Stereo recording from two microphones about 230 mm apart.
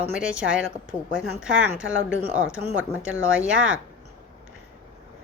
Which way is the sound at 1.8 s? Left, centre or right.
Right.